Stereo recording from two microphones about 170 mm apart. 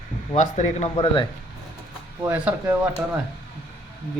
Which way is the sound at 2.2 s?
10° right (ahead or behind).